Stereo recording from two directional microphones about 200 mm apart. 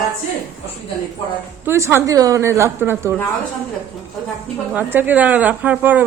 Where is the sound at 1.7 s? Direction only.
15° right (ahead or behind).